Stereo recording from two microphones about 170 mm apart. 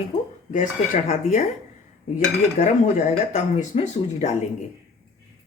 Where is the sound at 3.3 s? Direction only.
40° left (ahead or behind).